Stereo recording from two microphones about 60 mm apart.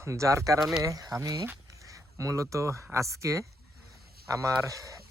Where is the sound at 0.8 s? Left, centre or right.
Right.